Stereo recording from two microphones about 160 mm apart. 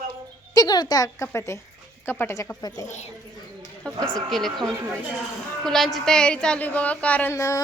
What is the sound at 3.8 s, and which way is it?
A woman's voice, 5° left (ahead or behind).